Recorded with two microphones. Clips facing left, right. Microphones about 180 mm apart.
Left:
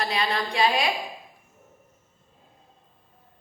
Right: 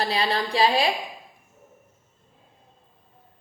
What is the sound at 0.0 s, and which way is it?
Speech, 30° right (ahead or behind).